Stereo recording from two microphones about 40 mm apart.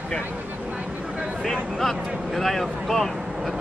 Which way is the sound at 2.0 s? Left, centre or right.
Right.